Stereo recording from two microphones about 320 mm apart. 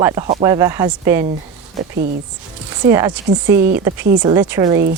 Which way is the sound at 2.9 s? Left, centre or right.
Centre.